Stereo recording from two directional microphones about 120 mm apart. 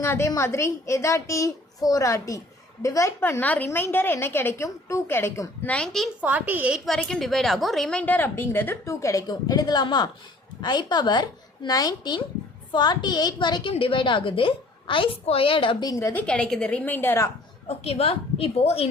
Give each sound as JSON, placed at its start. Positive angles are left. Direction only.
{"t": 0.0, "sound": "a woman's voice", "side_deg": 25}
{"t": 5.7, "sound": "a woman's voice", "side_deg": 5}
{"t": 6.2, "sound": "a woman's voice", "side_deg": -15}
{"t": 6.8, "sound": "a woman's voice", "side_deg": 5}
{"t": 15.8, "sound": "a woman's voice", "side_deg": 30}
{"t": 16.1, "sound": "a woman's voice", "side_deg": 10}
{"t": 17.7, "sound": "a woman's voice", "side_deg": 55}